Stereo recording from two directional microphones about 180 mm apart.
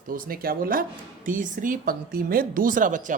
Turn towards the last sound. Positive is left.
turn(degrees=-45)  # may be behind; listen again after turning